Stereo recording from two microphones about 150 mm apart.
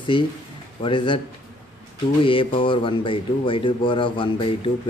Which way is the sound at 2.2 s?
35° left (ahead or behind).